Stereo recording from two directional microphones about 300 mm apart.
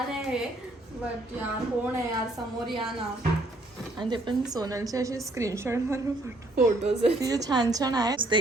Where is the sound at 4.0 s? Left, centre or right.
Centre.